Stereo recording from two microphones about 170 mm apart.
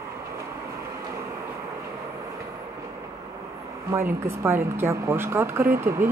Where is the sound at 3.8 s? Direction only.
15° right (ahead or behind).